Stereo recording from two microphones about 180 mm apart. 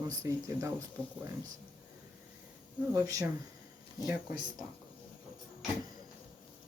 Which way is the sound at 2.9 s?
20° right (ahead or behind).